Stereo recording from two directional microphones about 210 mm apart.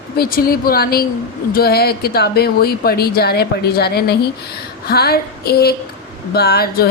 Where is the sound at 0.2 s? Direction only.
45° left (ahead or behind).